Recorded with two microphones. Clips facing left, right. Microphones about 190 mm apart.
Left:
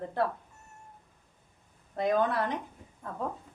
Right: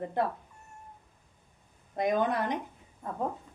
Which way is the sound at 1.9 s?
15° right (ahead or behind).